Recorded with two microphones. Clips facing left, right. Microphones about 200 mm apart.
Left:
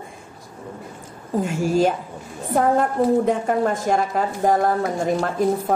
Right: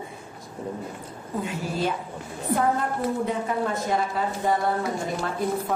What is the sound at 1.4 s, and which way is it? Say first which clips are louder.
Speech: left 9 dB; 45° left (ahead or behind).